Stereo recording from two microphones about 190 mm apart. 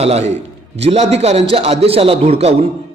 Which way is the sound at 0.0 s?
35° right (ahead or behind).